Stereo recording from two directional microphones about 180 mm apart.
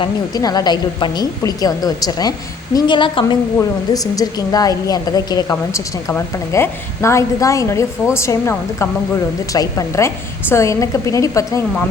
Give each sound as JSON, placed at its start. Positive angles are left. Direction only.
{"t": 0.0, "sound": "a woman's voice", "side_deg": 20}